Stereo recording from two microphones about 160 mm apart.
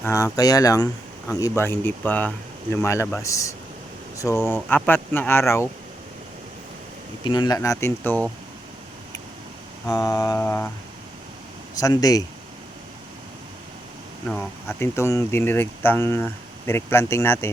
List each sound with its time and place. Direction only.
0.0 s speech: 20° left (ahead or behind)
7.3 s speech: 25° left (ahead or behind); by 8.3 s 10° left (ahead or behind)
9.9 s speech: 20° left (ahead or behind)
11.7 s speech: 25° left (ahead or behind)
14.3 s speech: 10° left (ahead or behind)